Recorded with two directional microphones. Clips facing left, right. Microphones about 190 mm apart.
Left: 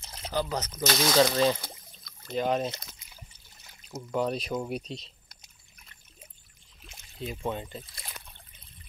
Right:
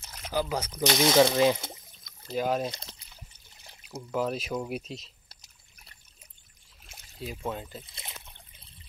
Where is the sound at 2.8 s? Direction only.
30° right (ahead or behind).